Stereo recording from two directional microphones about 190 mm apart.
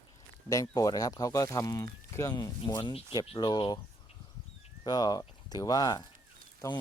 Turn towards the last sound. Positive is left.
turn(degrees=20)  # may be behind; listen again after turning